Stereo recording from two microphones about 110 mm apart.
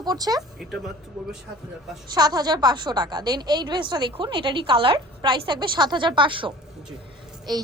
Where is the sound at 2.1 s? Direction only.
35° right (ahead or behind).